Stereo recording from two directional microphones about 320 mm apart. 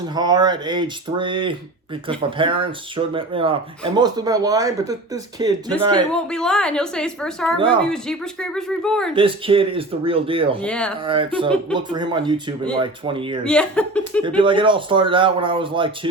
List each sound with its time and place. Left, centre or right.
0.1 s speech: centre
6.1 s a woman's voice: centre
9.1 s speech: centre
10.6 s a woman's voice: centre
11.0 s speech: centre
13.4 s a woman's voice: centre
14.4 s speech: centre